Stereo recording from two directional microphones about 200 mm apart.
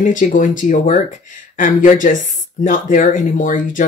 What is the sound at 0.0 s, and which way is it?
Speech, 40° left (ahead or behind).